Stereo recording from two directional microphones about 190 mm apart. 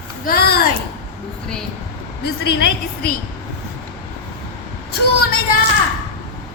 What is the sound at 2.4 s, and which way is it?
Speech, 60° left (ahead or behind).